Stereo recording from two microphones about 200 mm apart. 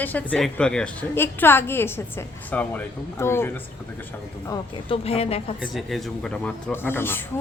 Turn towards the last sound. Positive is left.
turn(degrees=10)  # may be behind; listen again after turning